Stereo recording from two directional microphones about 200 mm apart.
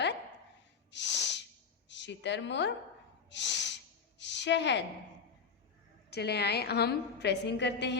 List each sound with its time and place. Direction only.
0.9 s snort: 60° left (ahead or behind)
1.9 s a woman's voice: 60° left (ahead or behind)
3.2 s snort: 60° left (ahead or behind)
4.2 s a sound: 60° left (ahead or behind)
6.1 s a woman's voice: 55° left (ahead or behind)